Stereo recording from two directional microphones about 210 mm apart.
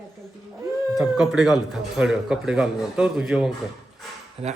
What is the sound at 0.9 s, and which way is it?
Speech, centre (ahead or behind).